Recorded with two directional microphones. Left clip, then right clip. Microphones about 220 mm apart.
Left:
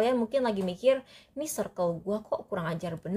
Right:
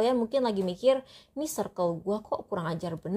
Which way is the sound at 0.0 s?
20° right (ahead or behind).